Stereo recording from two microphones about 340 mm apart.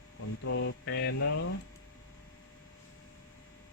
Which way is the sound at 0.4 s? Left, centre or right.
Left.